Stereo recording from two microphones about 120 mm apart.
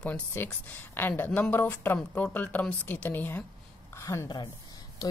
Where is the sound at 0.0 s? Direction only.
15° left (ahead or behind).